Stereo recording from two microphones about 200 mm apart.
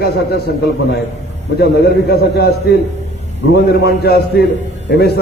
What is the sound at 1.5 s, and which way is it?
A man's voice, 55° left (ahead or behind).